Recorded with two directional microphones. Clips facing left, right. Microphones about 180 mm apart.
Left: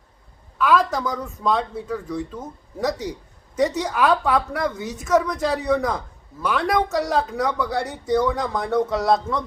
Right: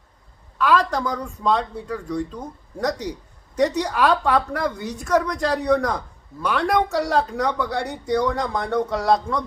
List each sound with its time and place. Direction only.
0.6 s speech: 5° left (ahead or behind)